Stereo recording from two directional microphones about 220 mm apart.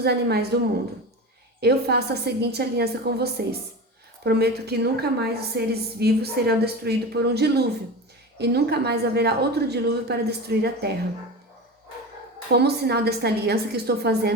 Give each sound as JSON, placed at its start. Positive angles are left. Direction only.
{"t": 0.0, "sound": "a woman's voice", "side_deg": -45}
{"t": 1.6, "sound": "a woman's voice", "side_deg": -45}
{"t": 12.5, "sound": "a woman's voice", "side_deg": -50}